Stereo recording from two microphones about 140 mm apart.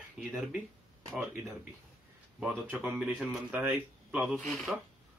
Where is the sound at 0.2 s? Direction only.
5° right (ahead or behind).